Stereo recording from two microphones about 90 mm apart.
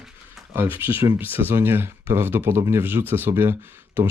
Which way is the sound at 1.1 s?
20° right (ahead or behind).